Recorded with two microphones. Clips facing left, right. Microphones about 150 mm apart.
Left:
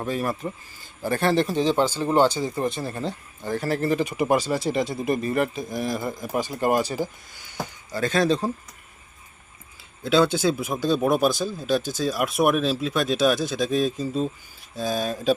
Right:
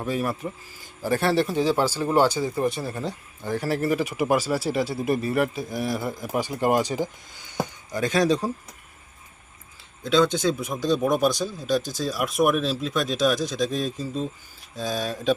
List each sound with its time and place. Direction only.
0.1 s speech: 5° right (ahead or behind)
10.0 s speech: 5° left (ahead or behind)
15.0 s mantra: 35° left (ahead or behind)